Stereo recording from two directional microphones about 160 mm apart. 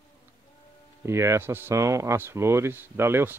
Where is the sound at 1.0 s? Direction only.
15° right (ahead or behind).